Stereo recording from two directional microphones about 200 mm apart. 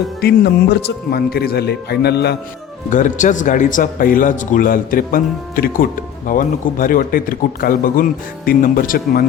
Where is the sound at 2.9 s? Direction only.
40° left (ahead or behind).